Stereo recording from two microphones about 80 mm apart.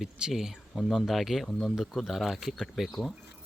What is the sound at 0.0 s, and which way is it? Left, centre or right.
Speech, centre.